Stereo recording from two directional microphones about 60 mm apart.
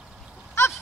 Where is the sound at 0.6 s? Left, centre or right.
Left.